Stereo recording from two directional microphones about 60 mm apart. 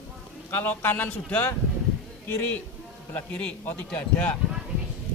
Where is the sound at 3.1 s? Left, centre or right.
Left.